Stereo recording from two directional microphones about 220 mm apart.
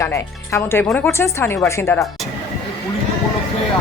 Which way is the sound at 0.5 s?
10° left (ahead or behind).